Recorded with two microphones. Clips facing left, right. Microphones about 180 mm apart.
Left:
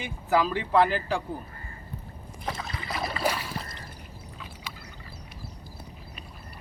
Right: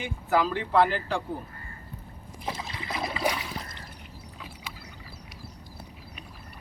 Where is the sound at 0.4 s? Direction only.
10° left (ahead or behind).